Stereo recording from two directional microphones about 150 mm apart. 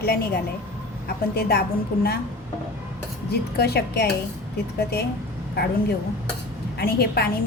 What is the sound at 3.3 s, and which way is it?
Speech, 90° left.